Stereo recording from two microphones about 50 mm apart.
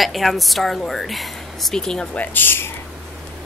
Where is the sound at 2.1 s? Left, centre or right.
Left.